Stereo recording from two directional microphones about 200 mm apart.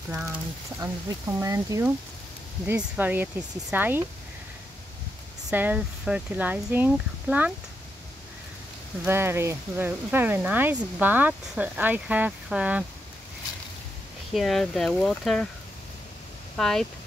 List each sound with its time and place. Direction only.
0.2 s speech: 15° right (ahead or behind)
5.5 s speech: 10° right (ahead or behind)
9.0 s speech: 10° right (ahead or behind)
14.3 s speech: centre (ahead or behind)
16.5 s speech: centre (ahead or behind)